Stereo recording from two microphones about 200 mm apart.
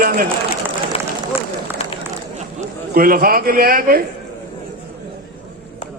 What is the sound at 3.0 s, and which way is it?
A man's voice, 45° right (ahead or behind).